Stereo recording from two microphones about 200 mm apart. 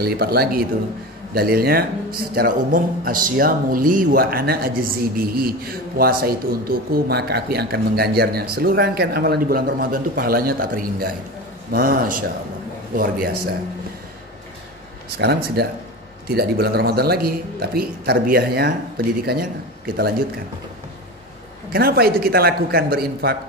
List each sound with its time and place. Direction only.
0.0 s a man's voice: 50° right (ahead or behind)
15.1 s a man's voice: 55° right (ahead or behind)
21.7 s a man's voice: 50° right (ahead or behind)